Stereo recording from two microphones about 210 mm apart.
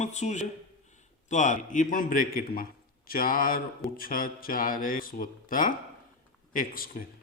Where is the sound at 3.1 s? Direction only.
45° left (ahead or behind).